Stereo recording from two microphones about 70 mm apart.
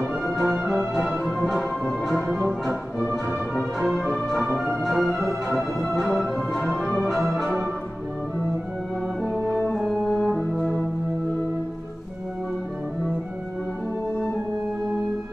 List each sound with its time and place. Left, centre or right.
0.2 s music: centre
3.0 s music: centre
3.8 s music: centre
9.7 s french horn: centre